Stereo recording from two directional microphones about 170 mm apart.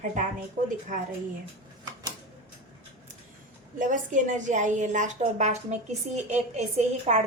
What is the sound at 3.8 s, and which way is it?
A woman's voice, 50° right (ahead or behind).